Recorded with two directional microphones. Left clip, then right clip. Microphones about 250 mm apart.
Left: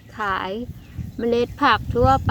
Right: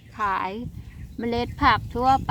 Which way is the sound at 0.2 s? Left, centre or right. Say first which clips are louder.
Left 1 dB; centre.